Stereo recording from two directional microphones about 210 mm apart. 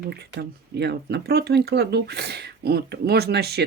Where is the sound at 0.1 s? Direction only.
50° right (ahead or behind).